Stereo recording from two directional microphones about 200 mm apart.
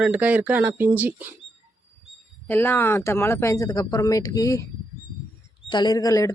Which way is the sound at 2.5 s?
10° left (ahead or behind).